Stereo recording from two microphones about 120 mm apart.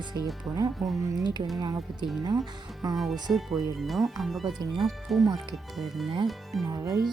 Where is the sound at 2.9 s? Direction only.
Centre (ahead or behind).